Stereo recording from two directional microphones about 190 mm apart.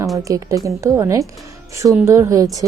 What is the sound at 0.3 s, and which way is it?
A woman's voice, 20° right (ahead or behind).